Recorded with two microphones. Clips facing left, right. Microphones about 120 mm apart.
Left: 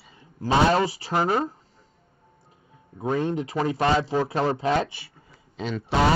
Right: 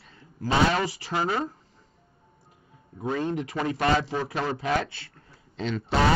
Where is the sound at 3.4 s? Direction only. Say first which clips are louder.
Left 3 dB; 30° left (ahead or behind).